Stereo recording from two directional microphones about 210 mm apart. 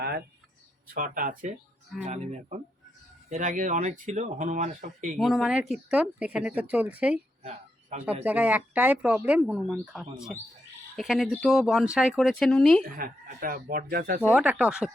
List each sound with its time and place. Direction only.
0.0 s a sound: 50° right (ahead or behind)
0.9 s speech: 45° right (ahead or behind)
5.1 s speech: centre (ahead or behind)
7.4 s a sound: 30° right (ahead or behind)
8.2 s speech: 5° right (ahead or behind)
12.8 s speech: 45° right (ahead or behind)
14.2 s speech: 10° right (ahead or behind)